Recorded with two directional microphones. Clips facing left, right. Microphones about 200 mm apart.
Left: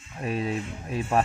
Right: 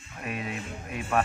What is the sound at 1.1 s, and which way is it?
Speech, 30° left (ahead or behind).